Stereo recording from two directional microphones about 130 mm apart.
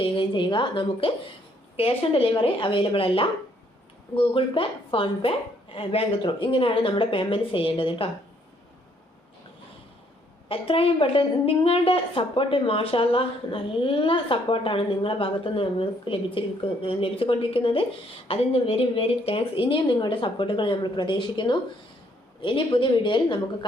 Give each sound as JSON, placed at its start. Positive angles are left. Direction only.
{"t": 0.0, "sound": "a woman's voice", "side_deg": 40}
{"t": 10.5, "sound": "a woman's voice", "side_deg": 45}